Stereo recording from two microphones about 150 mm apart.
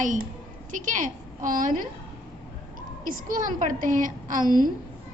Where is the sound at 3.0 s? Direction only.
65° right (ahead or behind).